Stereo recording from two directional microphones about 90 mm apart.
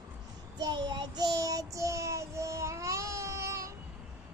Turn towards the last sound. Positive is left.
turn(degrees=-35)  # may be behind; listen again after turning